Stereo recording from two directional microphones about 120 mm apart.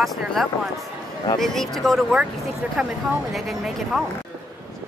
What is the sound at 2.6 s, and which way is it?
Speech, 15° right (ahead or behind).